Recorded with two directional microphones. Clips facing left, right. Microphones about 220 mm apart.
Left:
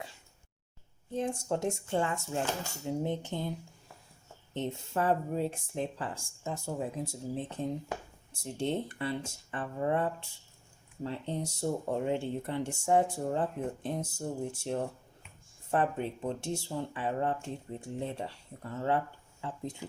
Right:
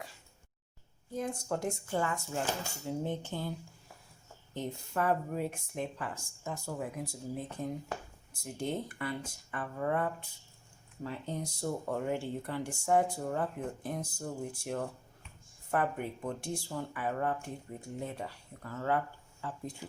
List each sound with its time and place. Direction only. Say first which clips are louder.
1.1 s speech: left 3 dB; 30° left (ahead or behind)
4.5 s speech: left 2 dB; 25° left (ahead or behind)
8.4 s speech: left 3 dB; 30° left (ahead or behind)